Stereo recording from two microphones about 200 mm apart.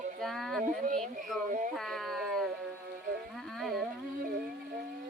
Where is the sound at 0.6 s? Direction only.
40° right (ahead or behind).